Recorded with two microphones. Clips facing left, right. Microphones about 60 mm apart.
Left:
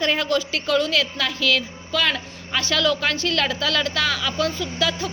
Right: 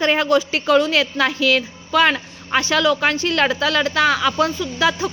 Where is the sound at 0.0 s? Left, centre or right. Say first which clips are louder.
Right 5 dB; right.